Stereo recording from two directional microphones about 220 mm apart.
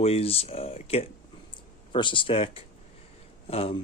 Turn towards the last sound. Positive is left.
turn(degrees=25)  # may be behind; listen again after turning